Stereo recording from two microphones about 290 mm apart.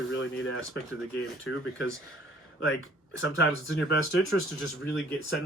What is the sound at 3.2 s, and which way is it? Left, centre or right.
Speech, left.